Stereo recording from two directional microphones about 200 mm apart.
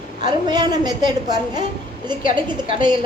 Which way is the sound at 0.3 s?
20° right (ahead or behind).